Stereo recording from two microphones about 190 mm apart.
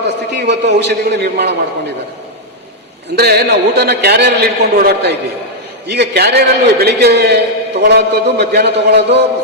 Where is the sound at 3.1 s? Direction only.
55° right (ahead or behind).